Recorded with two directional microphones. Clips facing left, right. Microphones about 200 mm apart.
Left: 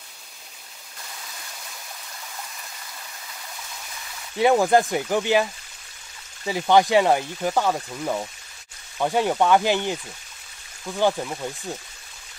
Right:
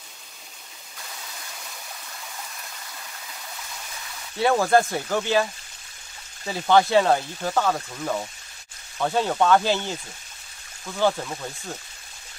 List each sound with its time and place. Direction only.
4.4 s speech: 15° left (ahead or behind)
11.0 s speech: 15° left (ahead or behind)